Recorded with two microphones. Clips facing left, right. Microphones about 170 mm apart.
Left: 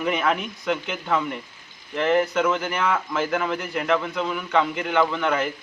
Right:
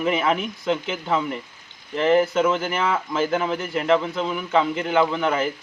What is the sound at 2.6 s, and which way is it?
Speech, 5° right (ahead or behind).